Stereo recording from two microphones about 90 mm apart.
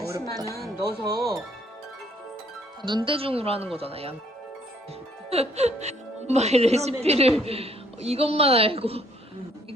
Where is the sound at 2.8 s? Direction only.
60° right (ahead or behind); by 4.2 s 90° right.